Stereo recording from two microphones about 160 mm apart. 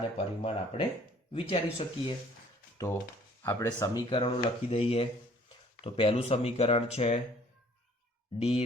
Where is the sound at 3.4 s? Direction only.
20° left (ahead or behind).